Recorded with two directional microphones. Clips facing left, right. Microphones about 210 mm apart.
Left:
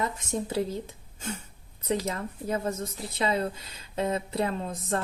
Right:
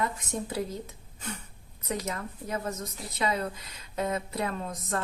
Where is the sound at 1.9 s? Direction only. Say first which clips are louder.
Left 4 dB; 30° left (ahead or behind).